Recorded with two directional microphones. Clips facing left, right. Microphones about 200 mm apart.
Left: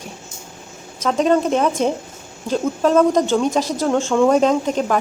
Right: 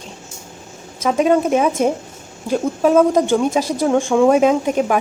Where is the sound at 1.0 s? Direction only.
10° right (ahead or behind).